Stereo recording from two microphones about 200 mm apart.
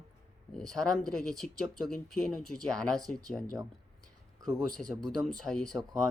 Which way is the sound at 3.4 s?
20° right (ahead or behind).